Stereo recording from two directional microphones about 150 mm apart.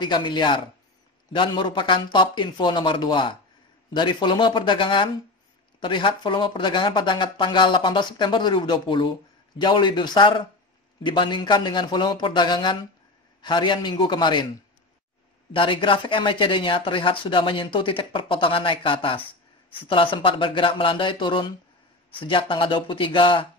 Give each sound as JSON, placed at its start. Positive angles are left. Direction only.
{"t": 0.0, "sound": "speech", "side_deg": 30}
{"t": 15.5, "sound": "speech", "side_deg": 35}